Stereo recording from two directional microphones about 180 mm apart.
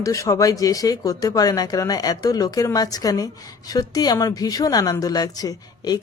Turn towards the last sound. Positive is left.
turn(degrees=20)  # may be behind; listen again after turning